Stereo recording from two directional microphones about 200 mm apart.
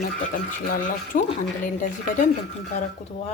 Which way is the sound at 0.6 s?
40° left (ahead or behind).